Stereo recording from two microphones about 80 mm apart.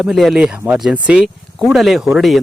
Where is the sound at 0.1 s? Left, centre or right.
Centre.